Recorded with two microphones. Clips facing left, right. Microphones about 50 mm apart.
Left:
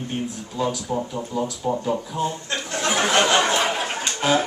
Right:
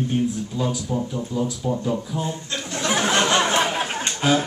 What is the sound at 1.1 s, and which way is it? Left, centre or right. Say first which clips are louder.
Speech: right 1 dB; left.